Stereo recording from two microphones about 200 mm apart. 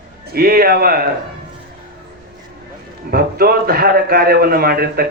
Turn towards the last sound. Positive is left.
turn(degrees=-50)  # may be behind; listen again after turning